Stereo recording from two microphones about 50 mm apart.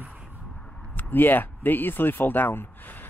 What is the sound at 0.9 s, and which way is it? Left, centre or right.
Speech, left.